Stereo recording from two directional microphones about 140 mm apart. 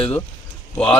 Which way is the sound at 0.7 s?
10° left (ahead or behind).